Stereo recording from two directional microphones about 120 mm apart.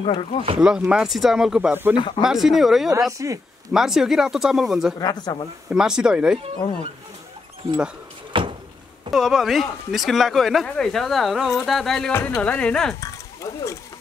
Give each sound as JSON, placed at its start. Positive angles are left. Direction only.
{"t": 0.0, "sound": "speech", "side_deg": 50}
{"t": 0.6, "sound": "speech", "side_deg": -5}
{"t": 2.0, "sound": "speech", "side_deg": 45}
{"t": 2.2, "sound": "speech", "side_deg": 0}
{"t": 3.1, "sound": "speech", "side_deg": -25}
{"t": 3.7, "sound": "speech", "side_deg": -5}
{"t": 5.0, "sound": "speech", "side_deg": 35}
{"t": 5.7, "sound": "speech", "side_deg": -5}
{"t": 8.3, "sound": "cupboard open or close", "side_deg": -45}
{"t": 9.1, "sound": "speech", "side_deg": 0}
{"t": 12.1, "sound": "speech", "side_deg": 20}
{"t": 13.0, "sound": "a sound", "side_deg": 25}